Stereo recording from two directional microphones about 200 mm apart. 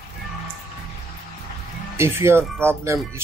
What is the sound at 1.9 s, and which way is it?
Speech, 15° right (ahead or behind).